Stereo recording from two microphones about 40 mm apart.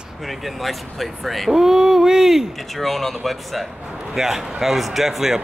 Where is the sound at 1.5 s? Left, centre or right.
Centre.